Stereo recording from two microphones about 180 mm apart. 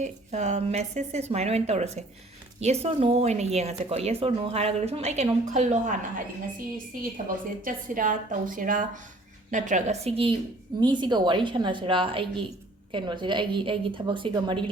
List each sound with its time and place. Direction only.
0.0 s speech: 40° right (ahead or behind)
7.6 s a woman's voice: 50° right (ahead or behind); by 14.6 s 30° right (ahead or behind)